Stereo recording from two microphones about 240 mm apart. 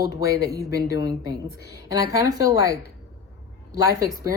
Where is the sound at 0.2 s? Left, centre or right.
Left.